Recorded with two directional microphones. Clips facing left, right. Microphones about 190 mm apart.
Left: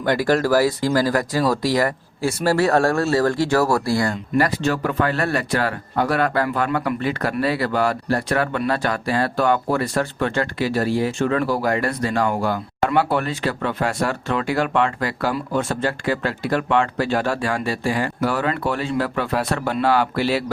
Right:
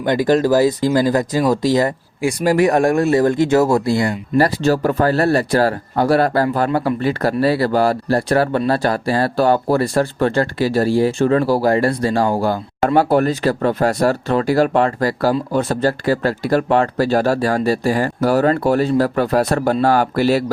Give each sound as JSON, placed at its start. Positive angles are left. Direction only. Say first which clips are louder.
{"t": 0.0, "sound": "speech", "louder": "right 4 dB", "side_deg": -20}
{"t": 4.4, "sound": "a man's voice", "louder": "right 5 dB", "side_deg": -35}